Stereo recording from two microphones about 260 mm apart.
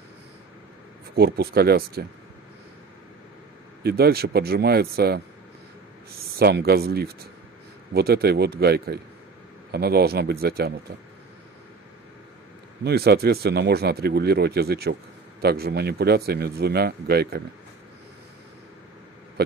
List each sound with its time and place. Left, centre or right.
1.1 s speech: right
3.8 s speech: right
12.8 s speech: right